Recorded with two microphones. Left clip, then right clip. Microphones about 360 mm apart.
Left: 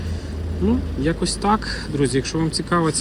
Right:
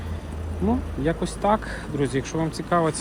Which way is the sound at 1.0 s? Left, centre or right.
Centre.